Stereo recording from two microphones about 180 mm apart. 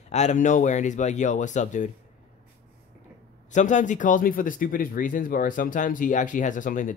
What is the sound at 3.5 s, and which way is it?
Speech, 45° left (ahead or behind).